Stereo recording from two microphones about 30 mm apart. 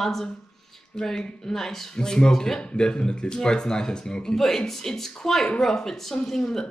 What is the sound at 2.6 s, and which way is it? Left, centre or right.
Speech, left.